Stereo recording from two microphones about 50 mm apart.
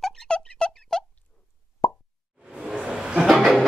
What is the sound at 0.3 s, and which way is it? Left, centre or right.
Music, centre.